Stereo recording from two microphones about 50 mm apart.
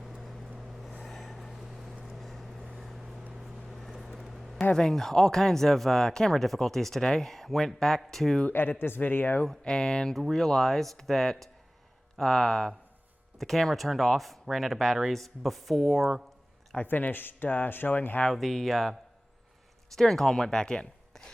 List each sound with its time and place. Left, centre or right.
0.7 s vehicle: centre
3.7 s a sound: centre
4.7 s speech: centre
8.4 s speech: left
9.5 s speech: centre
10.2 s speech: centre
16.8 s speech: left
18.3 s speech: centre
20.0 s speech: centre